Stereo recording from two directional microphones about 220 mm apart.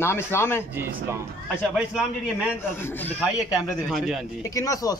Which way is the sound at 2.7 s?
10° left (ahead or behind).